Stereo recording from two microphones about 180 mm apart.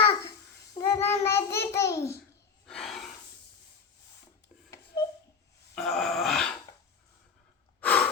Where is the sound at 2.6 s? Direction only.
Centre (ahead or behind).